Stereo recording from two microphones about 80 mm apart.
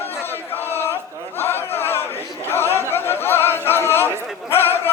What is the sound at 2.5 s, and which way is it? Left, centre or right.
Chatter, left.